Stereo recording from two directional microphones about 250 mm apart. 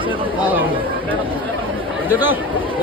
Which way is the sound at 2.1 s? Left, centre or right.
Centre.